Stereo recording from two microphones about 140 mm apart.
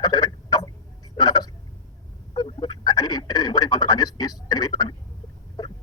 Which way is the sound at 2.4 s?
30° left (ahead or behind).